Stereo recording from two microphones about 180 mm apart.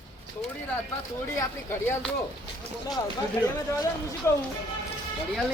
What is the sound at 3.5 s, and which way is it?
Speech, 20° left (ahead or behind).